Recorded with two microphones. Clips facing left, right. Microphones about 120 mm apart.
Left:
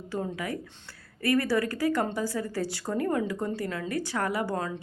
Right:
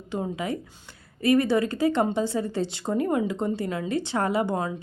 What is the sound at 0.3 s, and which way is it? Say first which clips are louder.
A woman's voice: right 4 dB; 20° right (ahead or behind).